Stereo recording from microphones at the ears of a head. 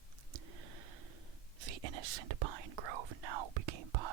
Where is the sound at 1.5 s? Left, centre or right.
Right.